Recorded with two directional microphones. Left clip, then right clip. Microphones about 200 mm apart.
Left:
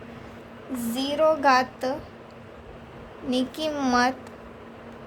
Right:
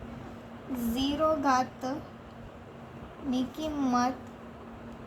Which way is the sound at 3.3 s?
60° left (ahead or behind).